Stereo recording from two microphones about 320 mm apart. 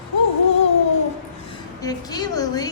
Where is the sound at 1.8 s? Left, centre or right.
Centre.